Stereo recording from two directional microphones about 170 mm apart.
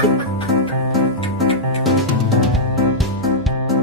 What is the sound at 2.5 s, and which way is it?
Music, centre (ahead or behind).